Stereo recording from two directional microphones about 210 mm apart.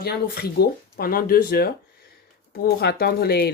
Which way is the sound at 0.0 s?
50° left (ahead or behind).